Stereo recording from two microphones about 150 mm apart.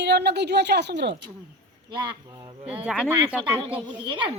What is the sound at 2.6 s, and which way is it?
Speech, 40° right (ahead or behind).